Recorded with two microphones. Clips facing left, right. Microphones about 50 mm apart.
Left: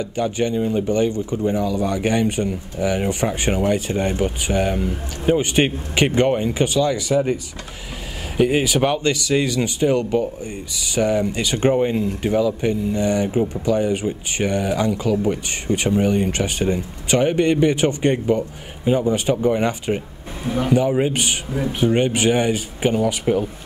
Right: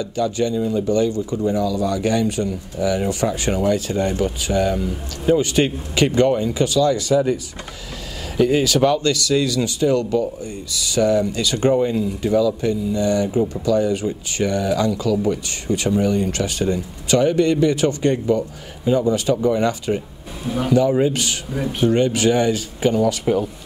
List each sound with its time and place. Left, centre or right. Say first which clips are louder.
0.0 s speech: right 1 dB; left
8.4 s speech: right 1 dB; left
20.4 s speech: left 1 dB; centre
21.0 s speech: right 1 dB; left
21.5 s speech: right 1 dB; centre
21.9 s speech: right 1 dB; left